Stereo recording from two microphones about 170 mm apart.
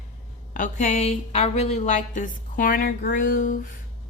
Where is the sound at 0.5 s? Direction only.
45° left (ahead or behind).